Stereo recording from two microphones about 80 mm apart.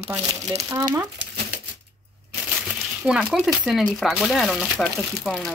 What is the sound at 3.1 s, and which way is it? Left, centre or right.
Speech, centre.